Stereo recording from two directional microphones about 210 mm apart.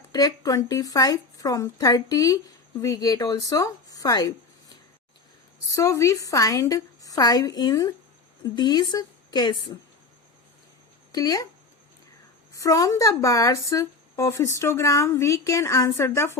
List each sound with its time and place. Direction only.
0.1 s speech: 20° left (ahead or behind)
5.7 s speech: 15° left (ahead or behind)
11.1 s speech: 20° left (ahead or behind)
12.5 s speech: 15° left (ahead or behind)